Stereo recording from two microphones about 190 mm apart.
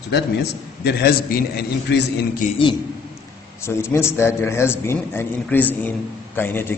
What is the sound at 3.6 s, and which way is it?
A man's voice, 15° left (ahead or behind).